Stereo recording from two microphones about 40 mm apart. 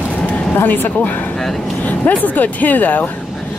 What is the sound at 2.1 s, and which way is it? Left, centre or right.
Speech, left.